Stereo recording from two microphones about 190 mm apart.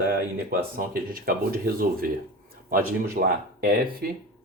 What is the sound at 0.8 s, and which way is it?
Speech, 50° right (ahead or behind).